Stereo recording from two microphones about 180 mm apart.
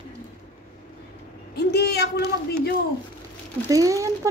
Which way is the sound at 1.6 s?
65° left (ahead or behind).